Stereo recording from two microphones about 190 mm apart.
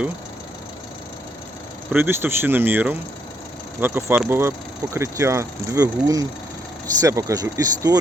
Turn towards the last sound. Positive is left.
turn(degrees=-20)  # may be behind; listen again after turning